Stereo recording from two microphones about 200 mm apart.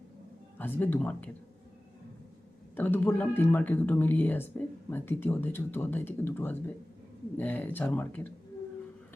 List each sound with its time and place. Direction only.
0.6 s speech: 10° left (ahead or behind)
2.7 s speech: 10° left (ahead or behind)